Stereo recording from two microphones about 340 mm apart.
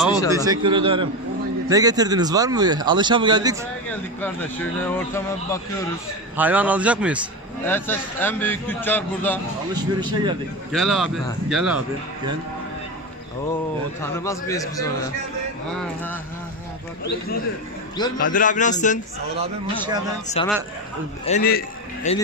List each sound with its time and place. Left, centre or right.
0.3 s speech: centre
3.9 s speech: centre
6.3 s speech: centre
9.9 s speech: centre
10.7 s speech: centre
14.0 s a man's voice: centre
18.2 s a man's voice: left
19.3 s speech: centre
20.4 s a man's voice: centre